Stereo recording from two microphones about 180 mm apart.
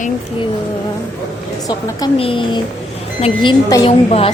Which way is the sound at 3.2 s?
25° left (ahead or behind).